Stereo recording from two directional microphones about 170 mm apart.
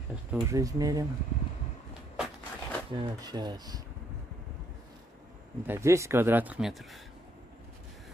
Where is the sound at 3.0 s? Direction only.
25° right (ahead or behind).